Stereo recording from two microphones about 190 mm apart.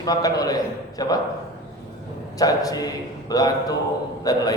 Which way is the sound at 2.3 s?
20° left (ahead or behind).